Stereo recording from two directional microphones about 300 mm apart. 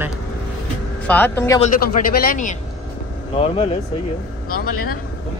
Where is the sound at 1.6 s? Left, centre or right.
Left.